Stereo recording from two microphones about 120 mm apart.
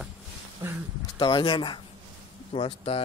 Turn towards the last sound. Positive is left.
turn(degrees=50)  # may be behind; listen again after turning